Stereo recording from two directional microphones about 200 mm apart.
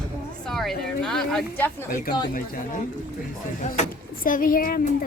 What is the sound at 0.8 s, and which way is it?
Speech, 5° left (ahead or behind).